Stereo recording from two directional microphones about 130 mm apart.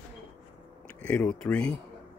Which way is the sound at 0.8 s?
15° left (ahead or behind).